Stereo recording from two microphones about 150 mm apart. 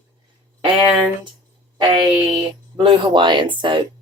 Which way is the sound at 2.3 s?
30° right (ahead or behind).